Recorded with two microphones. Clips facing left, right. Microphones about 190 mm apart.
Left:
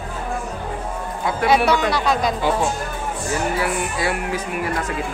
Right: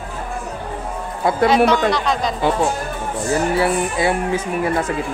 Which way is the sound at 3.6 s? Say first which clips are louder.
Right 5 dB; 25° right (ahead or behind).